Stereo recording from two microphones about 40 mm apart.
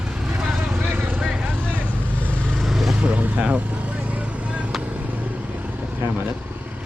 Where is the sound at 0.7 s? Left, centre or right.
Right.